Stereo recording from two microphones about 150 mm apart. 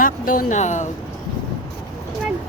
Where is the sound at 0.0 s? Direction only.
65° left (ahead or behind).